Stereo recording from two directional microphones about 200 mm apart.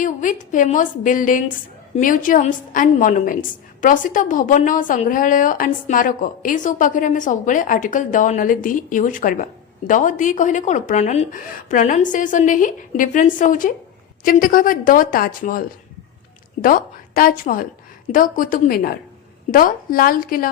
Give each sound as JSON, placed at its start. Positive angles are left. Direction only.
{"t": 0.0, "sound": "a woman's voice", "side_deg": 40}